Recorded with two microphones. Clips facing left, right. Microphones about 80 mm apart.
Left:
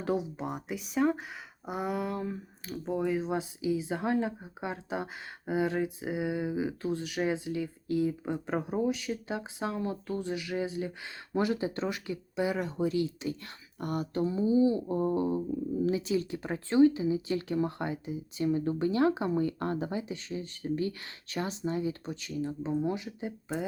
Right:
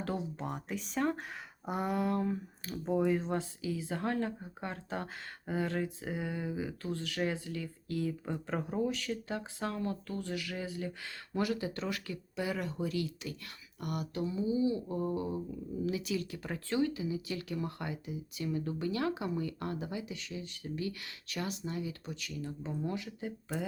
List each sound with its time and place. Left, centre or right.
0.0 s speech: centre